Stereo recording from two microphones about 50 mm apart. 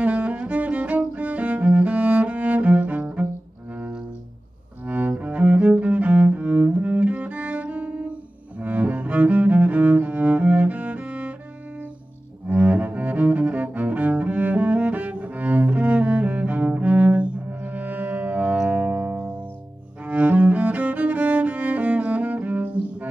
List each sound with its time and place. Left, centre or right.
0.0 s cello: right
4.8 s cello: right
12.4 s cello: right
18.7 s music: right
20.1 s cello: right